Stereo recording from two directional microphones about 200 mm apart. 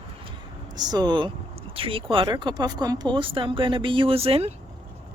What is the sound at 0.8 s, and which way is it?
Speech, 20° right (ahead or behind).